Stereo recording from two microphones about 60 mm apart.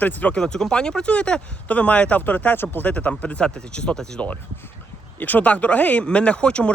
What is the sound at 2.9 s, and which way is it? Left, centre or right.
Speech, left.